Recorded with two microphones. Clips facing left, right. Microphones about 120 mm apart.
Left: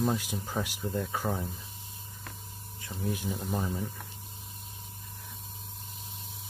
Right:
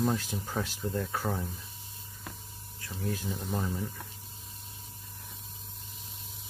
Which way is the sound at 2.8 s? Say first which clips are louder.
Left 1 dB; 15° left (ahead or behind).